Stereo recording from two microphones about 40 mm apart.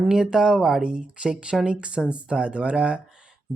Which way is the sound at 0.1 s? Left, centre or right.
Centre.